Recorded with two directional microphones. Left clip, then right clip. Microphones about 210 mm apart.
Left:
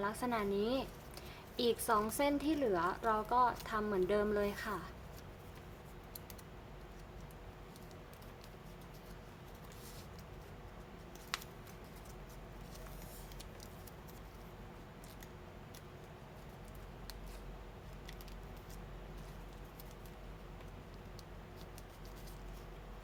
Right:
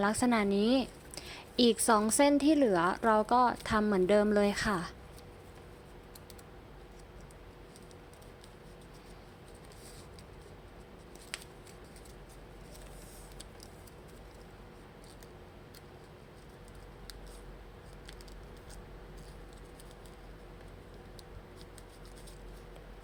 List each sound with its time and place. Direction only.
0.0 s a woman's voice: 35° right (ahead or behind)